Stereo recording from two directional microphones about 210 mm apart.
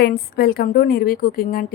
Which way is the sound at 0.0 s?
45° left (ahead or behind).